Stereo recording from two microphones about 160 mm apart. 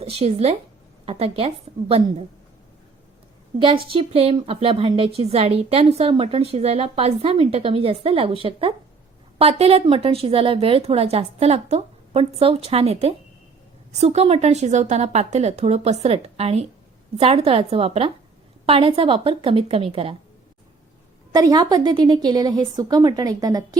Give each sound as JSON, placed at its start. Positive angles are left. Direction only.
{"t": 0.0, "sound": "a woman's voice", "side_deg": -40}
{"t": 3.6, "sound": "a woman's voice", "side_deg": -35}
{"t": 21.3, "sound": "a woman's voice", "side_deg": -25}